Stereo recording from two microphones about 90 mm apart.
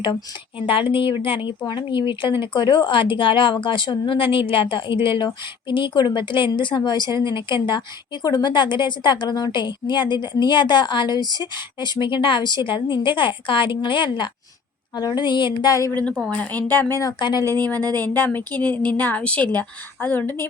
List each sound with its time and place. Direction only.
0.6 s speech: 75° left (ahead or behind)
14.9 s speech: 50° left (ahead or behind)
16.3 s a woman's voice: 20° left (ahead or behind)
17.2 s speech: 55° left (ahead or behind)
17.7 s speech: 45° right (ahead or behind)
18.0 s a woman's voice: 20° left (ahead or behind)